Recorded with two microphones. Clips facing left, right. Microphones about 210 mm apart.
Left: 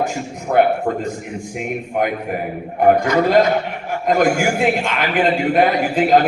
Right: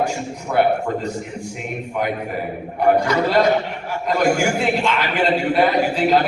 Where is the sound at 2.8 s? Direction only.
50° left (ahead or behind).